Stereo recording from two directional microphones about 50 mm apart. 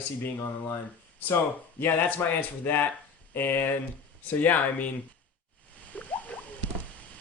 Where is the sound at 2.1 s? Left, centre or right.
Left.